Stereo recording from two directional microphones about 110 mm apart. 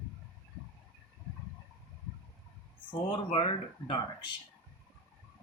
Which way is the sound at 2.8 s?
50° left (ahead or behind).